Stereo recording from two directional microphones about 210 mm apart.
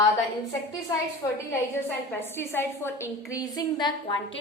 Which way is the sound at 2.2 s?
10° left (ahead or behind).